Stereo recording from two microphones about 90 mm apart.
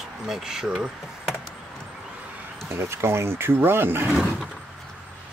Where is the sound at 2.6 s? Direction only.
25° right (ahead or behind).